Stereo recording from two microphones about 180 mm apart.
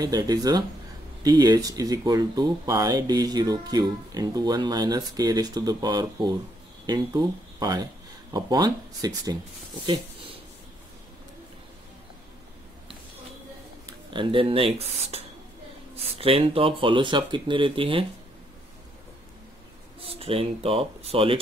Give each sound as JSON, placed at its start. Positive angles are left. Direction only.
{"t": 0.0, "sound": "speech", "side_deg": -20}
{"t": 9.8, "sound": "a sound", "side_deg": -30}
{"t": 14.1, "sound": "speech", "side_deg": -30}
{"t": 20.0, "sound": "speech", "side_deg": -35}